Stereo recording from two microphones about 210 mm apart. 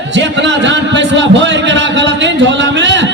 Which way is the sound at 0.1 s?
60° right (ahead or behind).